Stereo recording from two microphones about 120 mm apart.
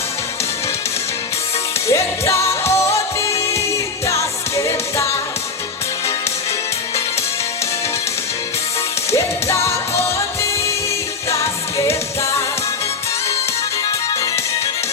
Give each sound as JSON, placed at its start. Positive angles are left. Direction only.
{"t": 1.9, "sound": "music", "side_deg": 25}
{"t": 9.1, "sound": "music", "side_deg": 25}